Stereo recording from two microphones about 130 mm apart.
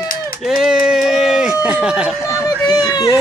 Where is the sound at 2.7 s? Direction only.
30° left (ahead or behind).